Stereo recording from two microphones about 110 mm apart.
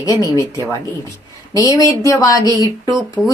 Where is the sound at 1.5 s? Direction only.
30° left (ahead or behind).